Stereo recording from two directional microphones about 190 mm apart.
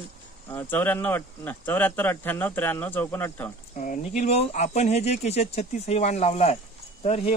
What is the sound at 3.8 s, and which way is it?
Speech, 40° left (ahead or behind).